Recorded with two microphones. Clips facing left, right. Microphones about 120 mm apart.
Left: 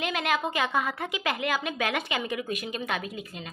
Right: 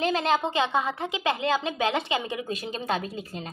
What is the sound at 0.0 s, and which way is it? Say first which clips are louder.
A woman's voice: right 4 dB; 30° right (ahead or behind).